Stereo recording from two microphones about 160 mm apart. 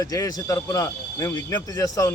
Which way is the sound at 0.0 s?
20° left (ahead or behind).